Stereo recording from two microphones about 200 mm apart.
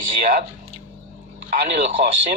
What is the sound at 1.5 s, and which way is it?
Speech, 40° right (ahead or behind).